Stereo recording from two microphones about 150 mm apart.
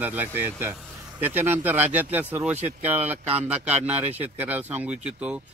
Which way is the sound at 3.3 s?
45° right (ahead or behind).